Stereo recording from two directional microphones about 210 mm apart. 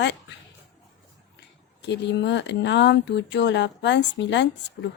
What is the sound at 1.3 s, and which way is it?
Speech, 55° left (ahead or behind).